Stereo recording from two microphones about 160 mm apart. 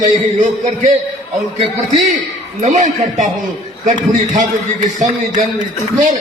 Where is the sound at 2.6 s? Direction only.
50° right (ahead or behind).